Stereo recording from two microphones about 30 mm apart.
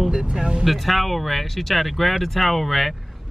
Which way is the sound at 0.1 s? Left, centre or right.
Right.